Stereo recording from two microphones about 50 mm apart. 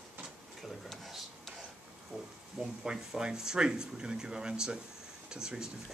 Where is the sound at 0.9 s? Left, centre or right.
Centre.